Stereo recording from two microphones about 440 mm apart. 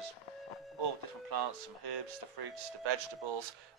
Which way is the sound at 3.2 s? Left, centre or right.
Right.